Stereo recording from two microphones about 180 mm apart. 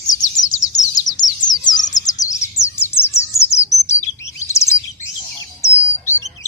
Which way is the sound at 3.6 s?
15° left (ahead or behind).